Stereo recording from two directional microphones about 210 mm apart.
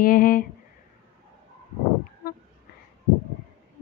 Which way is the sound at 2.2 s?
45° left (ahead or behind).